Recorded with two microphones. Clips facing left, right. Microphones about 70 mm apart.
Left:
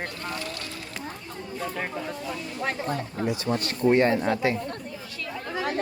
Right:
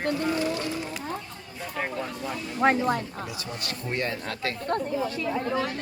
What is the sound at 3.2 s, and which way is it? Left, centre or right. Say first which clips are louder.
Speech: left 8 dB; left.